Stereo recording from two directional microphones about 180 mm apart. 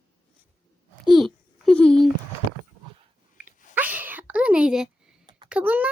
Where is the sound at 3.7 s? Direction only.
10° right (ahead or behind).